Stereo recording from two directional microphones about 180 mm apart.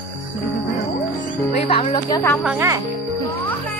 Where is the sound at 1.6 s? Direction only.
30° left (ahead or behind).